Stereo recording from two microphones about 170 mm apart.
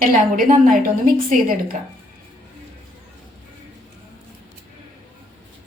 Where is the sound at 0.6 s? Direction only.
55° right (ahead or behind).